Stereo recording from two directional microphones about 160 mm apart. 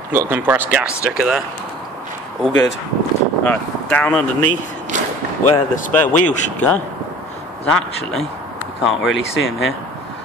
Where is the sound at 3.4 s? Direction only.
10° left (ahead or behind).